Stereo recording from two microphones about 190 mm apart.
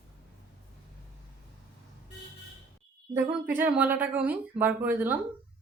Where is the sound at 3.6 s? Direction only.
10° right (ahead or behind).